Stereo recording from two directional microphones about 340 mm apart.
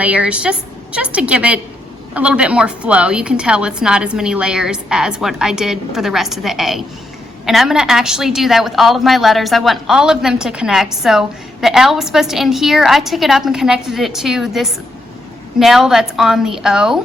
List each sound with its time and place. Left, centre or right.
0.0 s a woman's voice: centre